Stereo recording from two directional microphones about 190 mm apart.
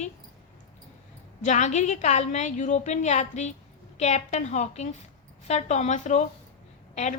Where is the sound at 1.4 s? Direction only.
40° left (ahead or behind).